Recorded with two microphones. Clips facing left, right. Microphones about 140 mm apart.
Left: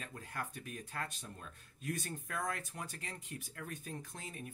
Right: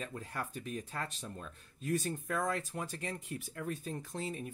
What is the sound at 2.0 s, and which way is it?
Speech, 30° right (ahead or behind).